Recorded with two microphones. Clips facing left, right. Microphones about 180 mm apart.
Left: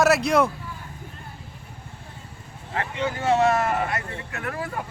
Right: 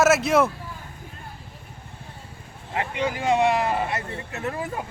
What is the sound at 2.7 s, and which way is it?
Speech, 15° right (ahead or behind).